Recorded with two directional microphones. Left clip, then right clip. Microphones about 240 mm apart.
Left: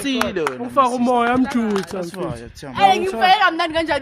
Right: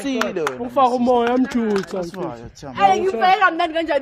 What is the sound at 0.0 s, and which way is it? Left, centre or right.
A man's voice, centre.